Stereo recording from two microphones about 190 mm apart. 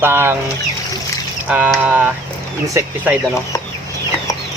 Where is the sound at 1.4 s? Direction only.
5° right (ahead or behind).